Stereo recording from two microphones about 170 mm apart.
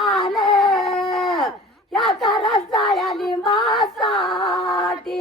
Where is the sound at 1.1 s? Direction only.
Centre (ahead or behind).